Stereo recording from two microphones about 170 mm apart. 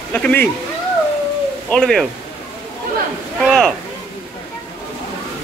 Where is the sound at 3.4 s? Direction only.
Centre (ahead or behind).